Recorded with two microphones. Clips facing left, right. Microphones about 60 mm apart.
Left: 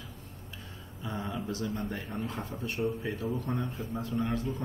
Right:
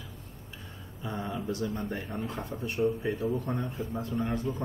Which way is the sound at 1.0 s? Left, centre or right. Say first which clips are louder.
Right 1 dB; centre.